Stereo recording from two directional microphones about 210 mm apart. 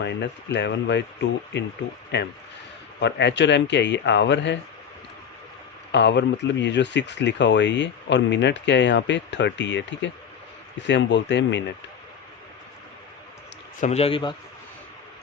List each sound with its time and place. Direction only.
0.0 s speech: 55° left (ahead or behind)
5.9 s speech: 55° left (ahead or behind)
13.8 s speech: 30° left (ahead or behind)